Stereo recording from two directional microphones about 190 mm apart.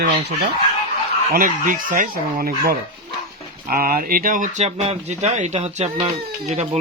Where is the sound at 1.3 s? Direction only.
45° right (ahead or behind).